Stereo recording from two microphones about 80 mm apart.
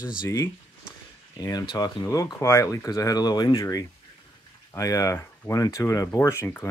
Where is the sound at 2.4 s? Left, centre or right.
Left.